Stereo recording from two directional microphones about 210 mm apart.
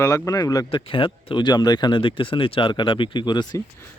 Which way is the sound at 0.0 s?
15° left (ahead or behind).